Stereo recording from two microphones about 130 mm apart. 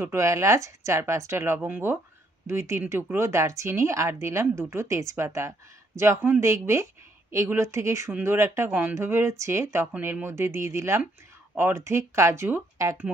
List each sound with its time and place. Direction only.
0.0 s speech: 20° right (ahead or behind)